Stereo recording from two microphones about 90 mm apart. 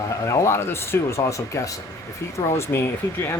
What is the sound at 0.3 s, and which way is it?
A man's voice, 30° left (ahead or behind).